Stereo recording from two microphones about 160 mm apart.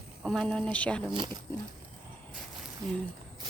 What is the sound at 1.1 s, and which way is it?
Speech, 30° right (ahead or behind).